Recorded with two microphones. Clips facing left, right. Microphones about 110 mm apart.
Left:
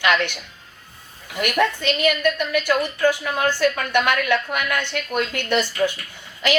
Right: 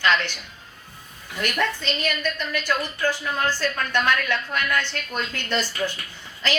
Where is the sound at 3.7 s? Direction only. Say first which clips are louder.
Left 3 dB; 10° left (ahead or behind).